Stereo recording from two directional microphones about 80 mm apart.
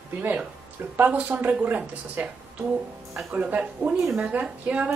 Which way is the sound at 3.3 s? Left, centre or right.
Centre.